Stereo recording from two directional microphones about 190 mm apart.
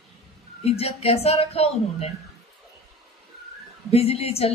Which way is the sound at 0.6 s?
30° left (ahead or behind).